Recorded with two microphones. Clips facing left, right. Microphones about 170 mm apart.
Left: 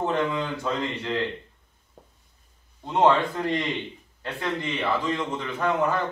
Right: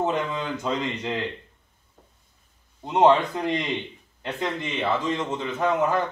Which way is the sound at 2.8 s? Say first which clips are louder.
Right 2 dB; 15° right (ahead or behind).